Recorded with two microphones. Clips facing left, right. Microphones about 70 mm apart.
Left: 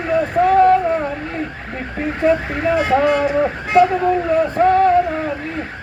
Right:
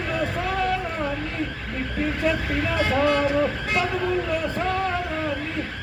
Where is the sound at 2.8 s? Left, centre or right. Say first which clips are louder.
Left 5 dB; left.